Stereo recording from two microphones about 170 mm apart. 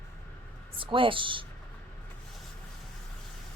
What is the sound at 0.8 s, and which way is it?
Speech, 30° right (ahead or behind).